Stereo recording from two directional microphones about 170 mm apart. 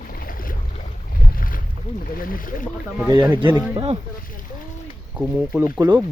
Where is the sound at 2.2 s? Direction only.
55° left (ahead or behind).